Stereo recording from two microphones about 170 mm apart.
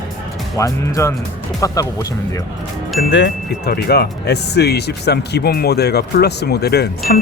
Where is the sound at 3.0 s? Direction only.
90° left.